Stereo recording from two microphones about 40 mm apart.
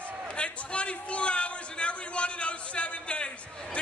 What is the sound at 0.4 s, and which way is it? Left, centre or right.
A man's voice, left.